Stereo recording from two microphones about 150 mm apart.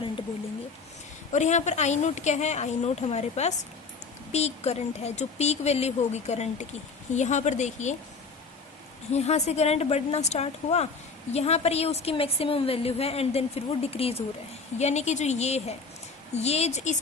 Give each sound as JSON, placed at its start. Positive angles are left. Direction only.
{"t": 1.3, "sound": "a woman's voice", "side_deg": 55}
{"t": 9.1, "sound": "a woman's voice", "side_deg": 45}